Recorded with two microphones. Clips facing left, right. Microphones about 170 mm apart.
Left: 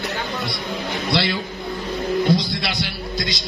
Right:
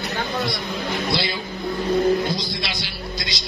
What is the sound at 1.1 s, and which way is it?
A man's voice, 65° left (ahead or behind).